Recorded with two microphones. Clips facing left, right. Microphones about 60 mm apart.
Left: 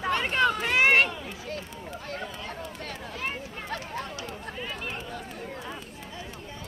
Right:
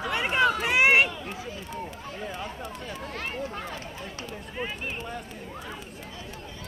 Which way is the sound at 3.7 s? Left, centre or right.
Left.